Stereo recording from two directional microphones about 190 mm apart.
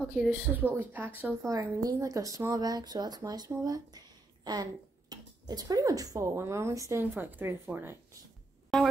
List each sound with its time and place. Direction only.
0.1 s speech: 10° right (ahead or behind)